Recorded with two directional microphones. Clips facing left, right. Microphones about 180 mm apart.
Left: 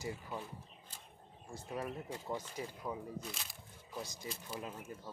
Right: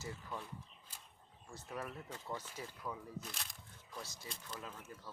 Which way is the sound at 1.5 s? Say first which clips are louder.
Left 4 dB; 15° left (ahead or behind).